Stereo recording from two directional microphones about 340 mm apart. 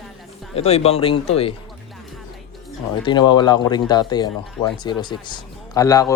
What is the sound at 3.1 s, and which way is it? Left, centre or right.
Speech, centre.